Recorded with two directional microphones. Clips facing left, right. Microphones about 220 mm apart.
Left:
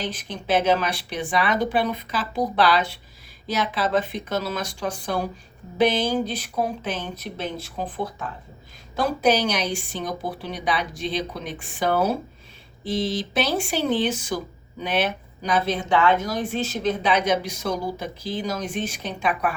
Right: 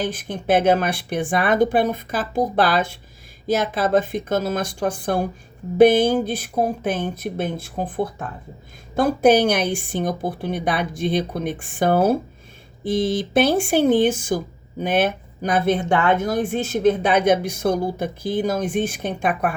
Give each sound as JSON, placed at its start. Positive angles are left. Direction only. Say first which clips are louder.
{"t": 0.0, "sound": "speech", "louder": "right 5 dB", "side_deg": -50}